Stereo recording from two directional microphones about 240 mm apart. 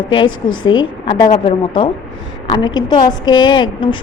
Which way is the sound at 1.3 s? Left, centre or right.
Left.